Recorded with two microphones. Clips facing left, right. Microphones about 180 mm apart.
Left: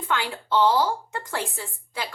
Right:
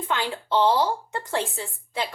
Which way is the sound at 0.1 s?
20° right (ahead or behind).